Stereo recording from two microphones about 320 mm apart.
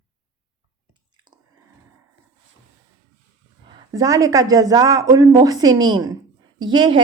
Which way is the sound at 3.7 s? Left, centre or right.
Centre.